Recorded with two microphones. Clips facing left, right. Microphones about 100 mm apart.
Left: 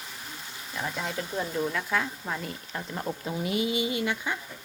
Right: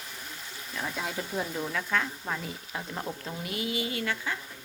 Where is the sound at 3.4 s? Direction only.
20° left (ahead or behind).